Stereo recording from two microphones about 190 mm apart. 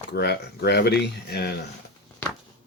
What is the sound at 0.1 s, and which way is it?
Speech, 60° left (ahead or behind).